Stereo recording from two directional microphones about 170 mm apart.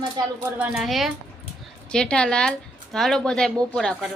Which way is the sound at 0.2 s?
25° right (ahead or behind).